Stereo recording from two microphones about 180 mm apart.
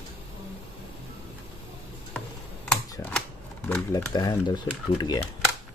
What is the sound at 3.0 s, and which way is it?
Shuffling cards, 5° left (ahead or behind).